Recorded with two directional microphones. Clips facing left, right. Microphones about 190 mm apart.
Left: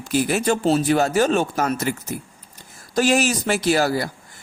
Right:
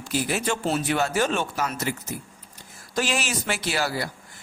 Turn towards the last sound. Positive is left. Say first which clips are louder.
# left 8 dB
turn(degrees=45)  # may be behind; listen again after turning